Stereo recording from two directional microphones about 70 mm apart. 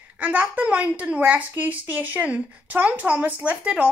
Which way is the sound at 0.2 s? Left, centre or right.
Right.